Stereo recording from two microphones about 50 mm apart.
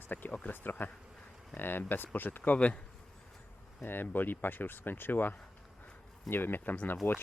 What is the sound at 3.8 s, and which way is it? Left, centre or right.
Speech, left.